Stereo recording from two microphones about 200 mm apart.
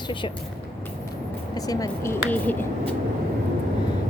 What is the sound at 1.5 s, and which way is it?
Speech, 20° left (ahead or behind).